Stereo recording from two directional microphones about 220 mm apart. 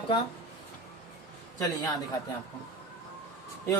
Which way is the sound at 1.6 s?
15° left (ahead or behind).